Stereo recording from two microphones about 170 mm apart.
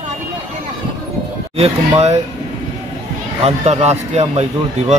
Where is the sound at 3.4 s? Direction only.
40° right (ahead or behind).